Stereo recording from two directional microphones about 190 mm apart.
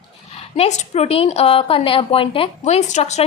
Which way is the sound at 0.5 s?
35° left (ahead or behind).